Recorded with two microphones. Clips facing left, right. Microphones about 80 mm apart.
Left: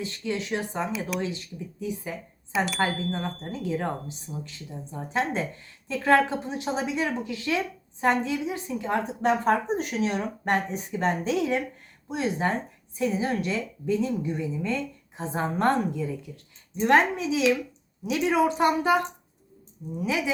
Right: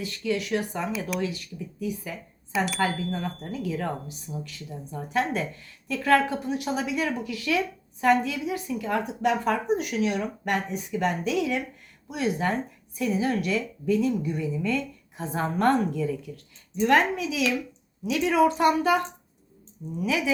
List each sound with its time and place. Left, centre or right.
0.0 s a woman's voice: left